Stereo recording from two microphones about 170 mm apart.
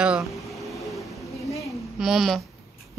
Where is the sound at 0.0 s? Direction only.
5° right (ahead or behind).